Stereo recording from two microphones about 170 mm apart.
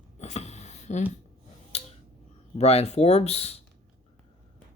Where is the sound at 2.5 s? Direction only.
40° left (ahead or behind).